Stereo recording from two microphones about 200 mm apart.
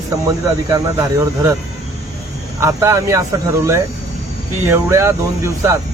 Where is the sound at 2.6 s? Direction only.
15° right (ahead or behind).